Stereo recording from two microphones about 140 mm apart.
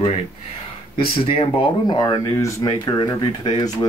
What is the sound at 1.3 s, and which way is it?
Speech, 40° left (ahead or behind).